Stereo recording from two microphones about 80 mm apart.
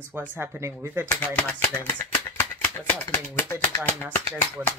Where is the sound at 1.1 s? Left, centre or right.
Centre.